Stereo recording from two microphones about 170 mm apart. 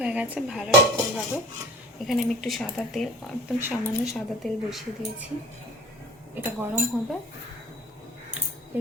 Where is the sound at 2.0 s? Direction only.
Centre (ahead or behind).